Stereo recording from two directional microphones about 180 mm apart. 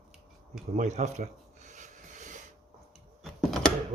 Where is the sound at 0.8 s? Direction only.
40° right (ahead or behind).